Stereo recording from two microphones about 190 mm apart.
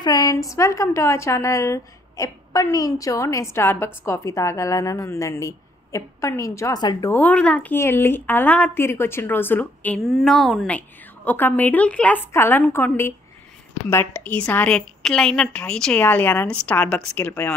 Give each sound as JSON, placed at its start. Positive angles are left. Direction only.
{"t": 0.0, "sound": "a woman's voice", "side_deg": 20}
{"t": 7.1, "sound": "a woman's voice", "side_deg": 10}